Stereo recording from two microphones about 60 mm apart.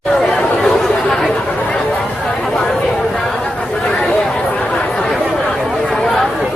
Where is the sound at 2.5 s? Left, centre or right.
Centre.